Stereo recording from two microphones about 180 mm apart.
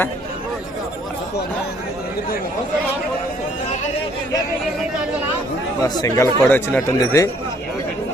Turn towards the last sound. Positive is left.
turn(degrees=20)  # may be behind; listen again after turning